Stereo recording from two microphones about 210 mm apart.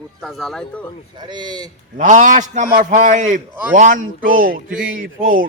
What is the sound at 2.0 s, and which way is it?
Speech, 35° right (ahead or behind).